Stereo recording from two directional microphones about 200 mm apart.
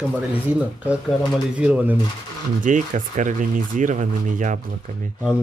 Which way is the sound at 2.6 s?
40° right (ahead or behind).